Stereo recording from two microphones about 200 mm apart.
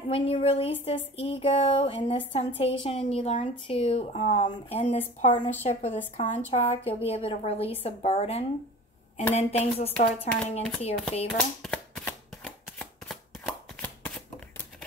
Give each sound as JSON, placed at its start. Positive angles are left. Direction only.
{"t": 0.1, "sound": "a woman's voice", "side_deg": 30}
{"t": 11.3, "sound": "shuffling cards", "side_deg": 0}